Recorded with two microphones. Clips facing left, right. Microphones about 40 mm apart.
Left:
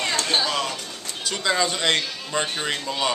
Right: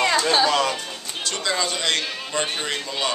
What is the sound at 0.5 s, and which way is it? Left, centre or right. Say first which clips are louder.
Music: right 5 dB; right.